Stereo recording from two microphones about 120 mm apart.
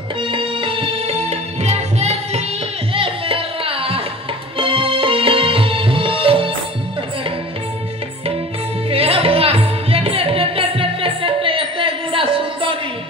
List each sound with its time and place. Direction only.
0.2 s music: 45° right (ahead or behind); by 2.4 s 65° right (ahead or behind)
2.9 s music: 50° right (ahead or behind)
8.9 s music: 55° right (ahead or behind)